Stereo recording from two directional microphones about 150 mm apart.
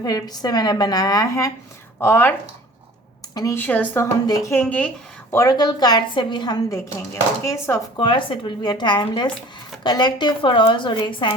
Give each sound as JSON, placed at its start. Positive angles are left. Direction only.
{"t": 0.0, "sound": "a woman's voice", "side_deg": 25}
{"t": 3.3, "sound": "a woman's voice", "side_deg": 20}
{"t": 4.6, "sound": "speech", "side_deg": 10}
{"t": 5.3, "sound": "a woman's voice", "side_deg": 20}
{"t": 7.9, "sound": "speech", "side_deg": 35}